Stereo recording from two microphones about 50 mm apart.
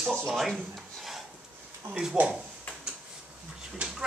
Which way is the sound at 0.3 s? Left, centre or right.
Centre.